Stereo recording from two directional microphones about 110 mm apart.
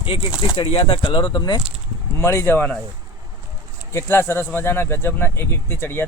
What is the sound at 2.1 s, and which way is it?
Speech, 25° left (ahead or behind).